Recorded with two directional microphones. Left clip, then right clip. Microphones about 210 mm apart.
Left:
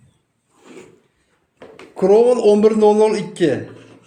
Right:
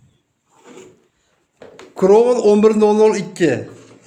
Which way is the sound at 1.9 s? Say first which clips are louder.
Right 1 dB; 30° right (ahead or behind).